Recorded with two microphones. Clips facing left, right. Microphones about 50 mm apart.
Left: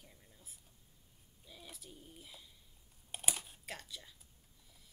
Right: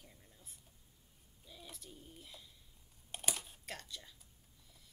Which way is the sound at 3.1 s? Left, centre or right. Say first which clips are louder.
Even; centre.